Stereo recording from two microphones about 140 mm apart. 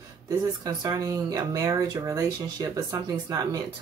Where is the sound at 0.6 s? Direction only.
25° right (ahead or behind).